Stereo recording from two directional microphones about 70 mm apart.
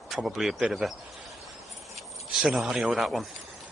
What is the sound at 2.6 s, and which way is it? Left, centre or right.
Speech, centre.